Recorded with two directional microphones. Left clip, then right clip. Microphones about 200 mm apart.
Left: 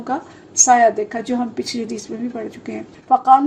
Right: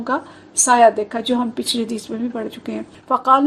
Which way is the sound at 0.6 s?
20° right (ahead or behind).